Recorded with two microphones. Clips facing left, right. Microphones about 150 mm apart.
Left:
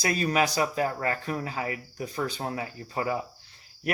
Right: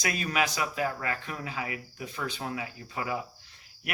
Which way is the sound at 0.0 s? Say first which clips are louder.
Left 4 dB; 35° left (ahead or behind).